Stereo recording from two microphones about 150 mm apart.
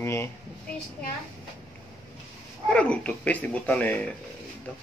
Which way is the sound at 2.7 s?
10° left (ahead or behind).